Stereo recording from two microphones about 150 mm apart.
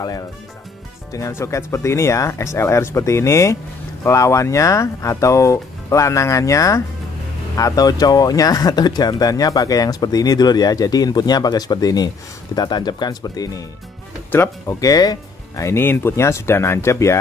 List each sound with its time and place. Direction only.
1.1 s speech: 20° left (ahead or behind)